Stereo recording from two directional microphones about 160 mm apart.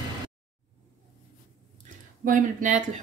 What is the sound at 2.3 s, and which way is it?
Speech, 55° right (ahead or behind).